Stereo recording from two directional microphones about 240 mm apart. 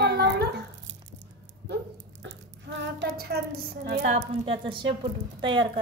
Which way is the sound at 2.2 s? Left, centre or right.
Right.